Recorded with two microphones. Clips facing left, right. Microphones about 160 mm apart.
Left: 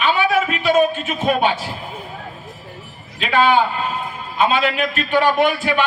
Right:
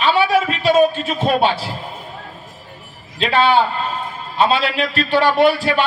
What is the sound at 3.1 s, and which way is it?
A man's voice, 35° right (ahead or behind).